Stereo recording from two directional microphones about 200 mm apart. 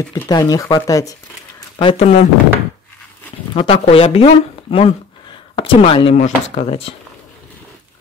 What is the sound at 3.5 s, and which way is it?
Speech, 25° left (ahead or behind).